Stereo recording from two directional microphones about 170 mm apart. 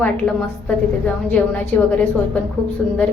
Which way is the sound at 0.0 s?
5° left (ahead or behind).